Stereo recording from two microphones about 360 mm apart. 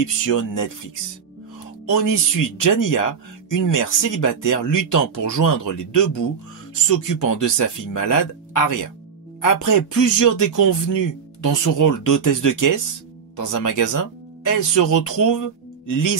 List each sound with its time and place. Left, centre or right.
0.0 s speech: left
1.9 s speech: left